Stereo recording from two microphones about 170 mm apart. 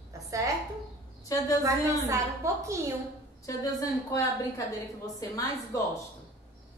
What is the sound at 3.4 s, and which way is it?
A woman's voice, 20° left (ahead or behind).